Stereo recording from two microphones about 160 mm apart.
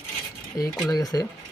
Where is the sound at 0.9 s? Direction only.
20° left (ahead or behind).